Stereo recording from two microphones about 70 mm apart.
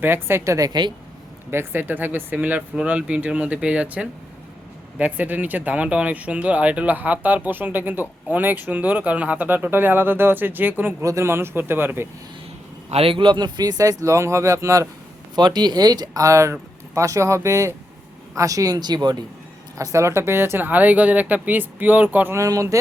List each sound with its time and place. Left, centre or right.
0.0 s speech: right
0.7 s speech: right
1.5 s speech: right
11.0 s speech: right
13.3 s speech: right
15.4 s speech: right
19.7 s speech: right
22.4 s speech: right